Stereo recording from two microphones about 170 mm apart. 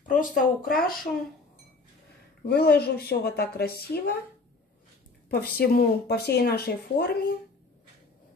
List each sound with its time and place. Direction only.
0.1 s speech: 50° left (ahead or behind)
2.4 s speech: 65° left (ahead or behind)
5.3 s speech: 65° left (ahead or behind)